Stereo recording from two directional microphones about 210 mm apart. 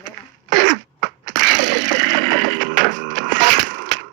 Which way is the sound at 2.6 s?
40° right (ahead or behind).